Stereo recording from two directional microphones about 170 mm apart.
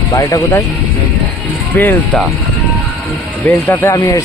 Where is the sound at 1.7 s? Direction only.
10° left (ahead or behind).